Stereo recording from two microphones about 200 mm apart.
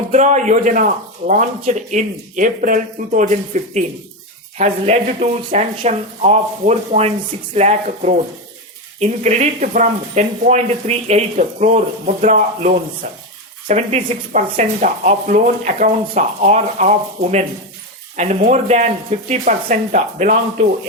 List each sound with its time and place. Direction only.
0.1 s speech: 35° right (ahead or behind)
18.2 s speech: 35° right (ahead or behind)